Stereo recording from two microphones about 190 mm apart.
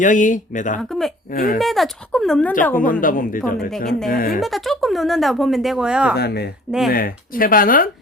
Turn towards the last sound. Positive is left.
turn(degrees=45)  # may be behind; listen again after turning